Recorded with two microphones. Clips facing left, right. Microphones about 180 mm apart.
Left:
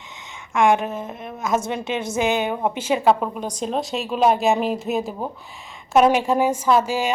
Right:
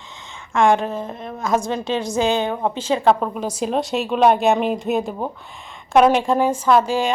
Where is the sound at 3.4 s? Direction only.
5° right (ahead or behind).